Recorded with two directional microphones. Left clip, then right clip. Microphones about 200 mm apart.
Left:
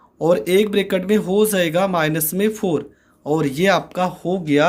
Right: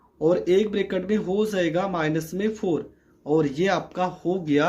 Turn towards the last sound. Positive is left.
turn(degrees=25)  # may be behind; listen again after turning